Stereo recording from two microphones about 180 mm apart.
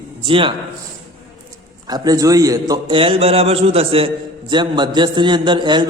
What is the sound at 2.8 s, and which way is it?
A man's voice, 30° right (ahead or behind).